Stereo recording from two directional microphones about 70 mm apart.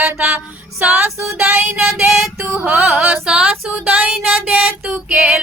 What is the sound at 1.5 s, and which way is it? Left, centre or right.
Child singing, centre.